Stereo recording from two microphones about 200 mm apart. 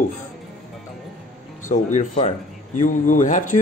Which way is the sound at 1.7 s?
35° left (ahead or behind).